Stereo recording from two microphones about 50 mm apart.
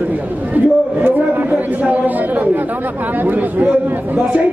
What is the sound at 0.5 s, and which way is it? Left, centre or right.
A man's voice, right.